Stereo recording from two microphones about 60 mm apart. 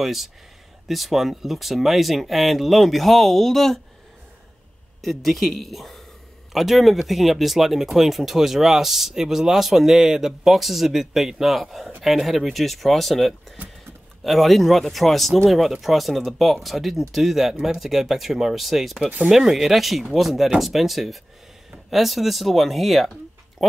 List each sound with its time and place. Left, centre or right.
0.0 s speech: centre
5.0 s speech: centre
19.0 s speech: centre
19.3 s speech: centre